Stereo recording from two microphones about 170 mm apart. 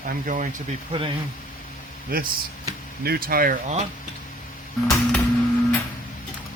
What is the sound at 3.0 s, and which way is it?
Speech, 60° right (ahead or behind).